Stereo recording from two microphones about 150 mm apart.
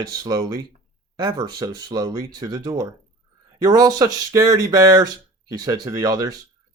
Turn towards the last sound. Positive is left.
turn(degrees=-25)  # may be behind; listen again after turning